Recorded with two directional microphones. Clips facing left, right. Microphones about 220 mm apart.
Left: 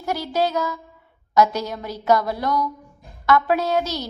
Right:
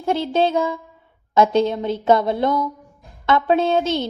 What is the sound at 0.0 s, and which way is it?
A woman's voice, 25° right (ahead or behind).